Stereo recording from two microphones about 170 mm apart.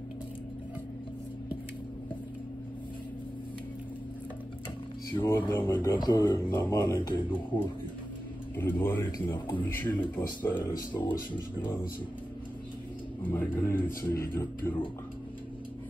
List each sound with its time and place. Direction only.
5.2 s speech: 15° left (ahead or behind)
8.5 s speech: 10° left (ahead or behind)
10.8 s speech: 25° left (ahead or behind)
13.2 s speech: 10° left (ahead or behind)